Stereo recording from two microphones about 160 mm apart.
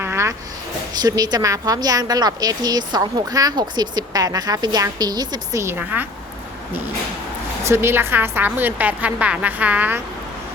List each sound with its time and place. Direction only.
0.0 s a sound: 15° right (ahead or behind)
1.0 s a woman's voice: 25° right (ahead or behind)
7.6 s a woman's voice: 15° right (ahead or behind)